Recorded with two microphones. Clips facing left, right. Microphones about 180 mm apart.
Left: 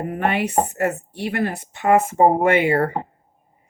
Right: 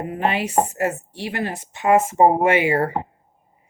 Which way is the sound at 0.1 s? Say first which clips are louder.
Even; 60° left (ahead or behind).